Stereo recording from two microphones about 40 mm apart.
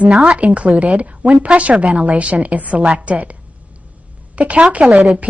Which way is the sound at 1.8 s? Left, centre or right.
Right.